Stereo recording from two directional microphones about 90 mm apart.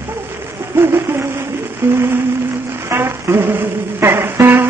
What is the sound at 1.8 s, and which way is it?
Music, 25° right (ahead or behind).